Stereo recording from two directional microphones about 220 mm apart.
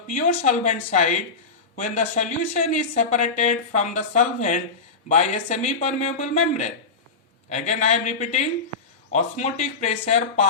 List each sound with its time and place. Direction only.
0.1 s speech: 30° left (ahead or behind)